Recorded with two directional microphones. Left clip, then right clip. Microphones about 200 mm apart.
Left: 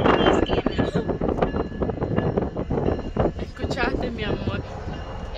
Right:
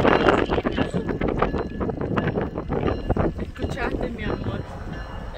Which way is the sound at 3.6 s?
30° left (ahead or behind).